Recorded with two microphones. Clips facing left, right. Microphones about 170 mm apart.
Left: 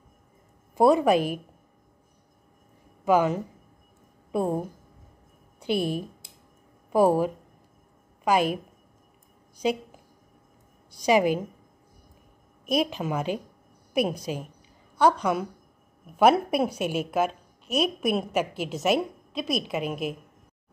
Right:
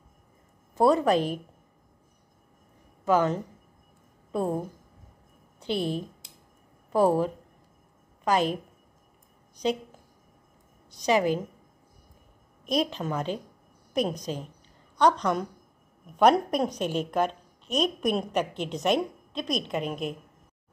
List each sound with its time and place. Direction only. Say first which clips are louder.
0.7 s a woman's voice: left 2 dB; 10° left (ahead or behind)
3.1 s a woman's voice: left 2 dB; 10° left (ahead or behind)
10.9 s a woman's voice: left 2 dB; 10° left (ahead or behind)
12.6 s a woman's voice: left 2 dB; 10° left (ahead or behind)